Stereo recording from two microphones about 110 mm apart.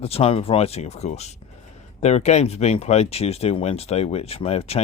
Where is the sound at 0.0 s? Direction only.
65° left (ahead or behind).